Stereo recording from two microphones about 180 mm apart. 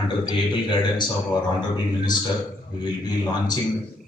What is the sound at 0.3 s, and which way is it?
Speech, 25° left (ahead or behind).